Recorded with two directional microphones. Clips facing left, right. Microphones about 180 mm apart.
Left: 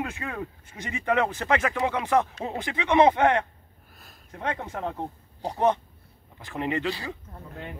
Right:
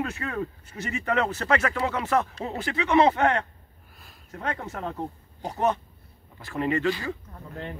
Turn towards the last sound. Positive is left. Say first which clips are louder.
# right 2 dB
turn(degrees=5)  # may be behind; listen again after turning